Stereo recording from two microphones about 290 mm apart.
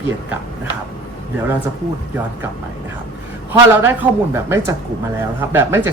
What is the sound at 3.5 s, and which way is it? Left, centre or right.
A man's voice, centre.